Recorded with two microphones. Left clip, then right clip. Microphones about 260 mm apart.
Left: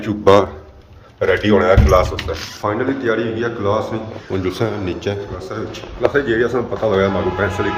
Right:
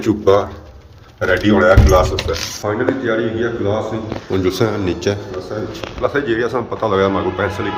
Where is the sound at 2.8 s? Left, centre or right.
Centre.